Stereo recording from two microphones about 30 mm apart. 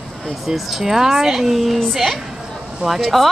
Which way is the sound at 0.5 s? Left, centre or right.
Centre.